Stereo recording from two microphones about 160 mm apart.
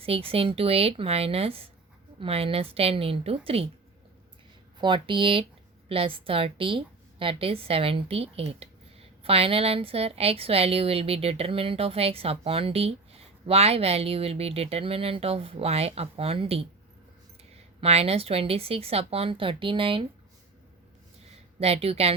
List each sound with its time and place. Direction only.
0.0 s a woman's voice: 35° right (ahead or behind)
4.8 s a woman's voice: 30° right (ahead or behind)
17.7 s a woman's voice: 40° right (ahead or behind)
21.6 s a woman's voice: 40° right (ahead or behind)